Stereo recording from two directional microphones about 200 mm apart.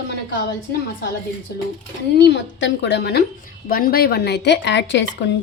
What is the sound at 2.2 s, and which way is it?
A woman's voice, 60° left (ahead or behind).